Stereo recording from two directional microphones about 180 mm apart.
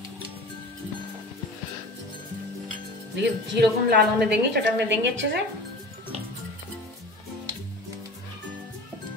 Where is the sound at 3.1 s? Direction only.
65° right (ahead or behind).